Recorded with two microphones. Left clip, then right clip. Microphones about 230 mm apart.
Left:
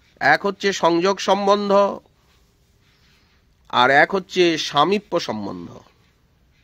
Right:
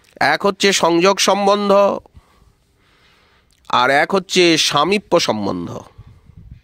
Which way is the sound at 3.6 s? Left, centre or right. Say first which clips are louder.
Right 1 dB; right.